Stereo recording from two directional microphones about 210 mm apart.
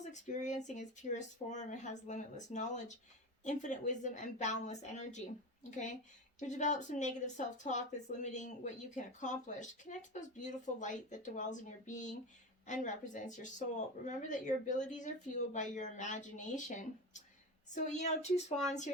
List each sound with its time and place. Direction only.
0.0 s a woman's voice: 35° left (ahead or behind)